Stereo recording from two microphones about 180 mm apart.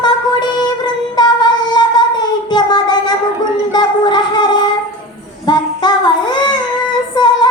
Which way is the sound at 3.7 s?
25° left (ahead or behind).